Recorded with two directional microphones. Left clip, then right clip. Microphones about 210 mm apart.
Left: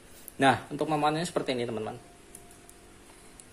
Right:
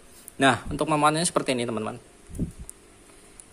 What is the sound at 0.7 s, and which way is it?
Speech, 25° right (ahead or behind).